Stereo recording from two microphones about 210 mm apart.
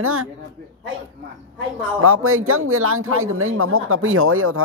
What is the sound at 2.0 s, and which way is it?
Speech, 85° right.